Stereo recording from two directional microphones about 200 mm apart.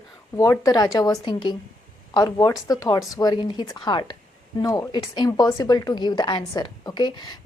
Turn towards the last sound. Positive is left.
turn(degrees=20)  # may be behind; listen again after turning